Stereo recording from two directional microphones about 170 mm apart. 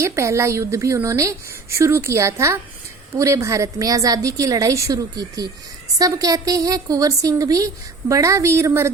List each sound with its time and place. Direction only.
0.0 s a woman's voice: 15° right (ahead or behind)